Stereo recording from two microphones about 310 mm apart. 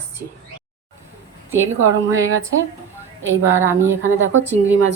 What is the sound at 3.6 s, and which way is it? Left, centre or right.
Speech, centre.